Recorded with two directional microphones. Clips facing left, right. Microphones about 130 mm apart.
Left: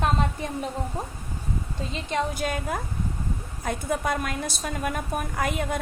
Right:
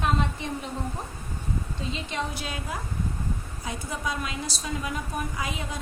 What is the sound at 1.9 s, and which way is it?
A woman's voice, 50° left (ahead or behind).